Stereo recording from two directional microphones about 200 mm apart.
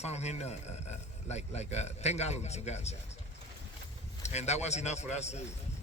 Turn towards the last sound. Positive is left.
turn(degrees=35)  # may be behind; listen again after turning